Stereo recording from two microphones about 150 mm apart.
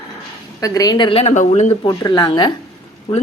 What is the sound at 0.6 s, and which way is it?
Speech, 25° left (ahead or behind).